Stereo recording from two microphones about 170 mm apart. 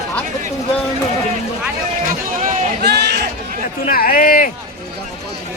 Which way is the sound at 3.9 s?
60° left (ahead or behind).